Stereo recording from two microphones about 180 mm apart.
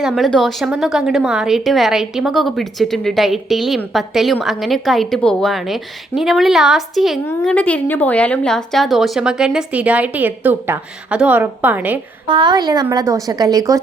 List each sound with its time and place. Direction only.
0.0 s a woman's voice: centre (ahead or behind)
7.3 s a woman's voice: 10° left (ahead or behind); by 11.9 s 10° right (ahead or behind)
12.3 s speech: 25° right (ahead or behind)